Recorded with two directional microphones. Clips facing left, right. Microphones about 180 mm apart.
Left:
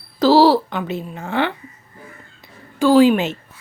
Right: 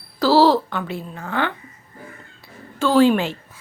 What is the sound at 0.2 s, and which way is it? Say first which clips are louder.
Speech: left 2 dB; 15° left (ahead or behind).